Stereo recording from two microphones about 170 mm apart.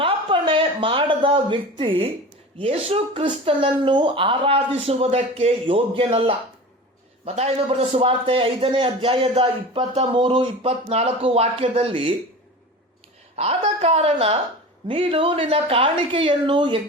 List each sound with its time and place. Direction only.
0.0 s a man's voice: 30° right (ahead or behind)
13.3 s a man's voice: 35° right (ahead or behind)